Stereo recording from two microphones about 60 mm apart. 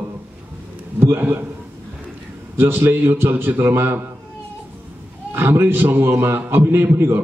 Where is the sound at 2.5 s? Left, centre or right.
Right.